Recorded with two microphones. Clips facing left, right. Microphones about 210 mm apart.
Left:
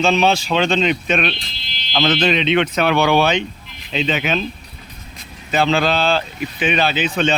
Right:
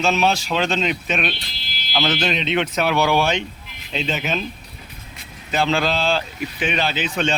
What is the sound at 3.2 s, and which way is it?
Speech, 65° left (ahead or behind).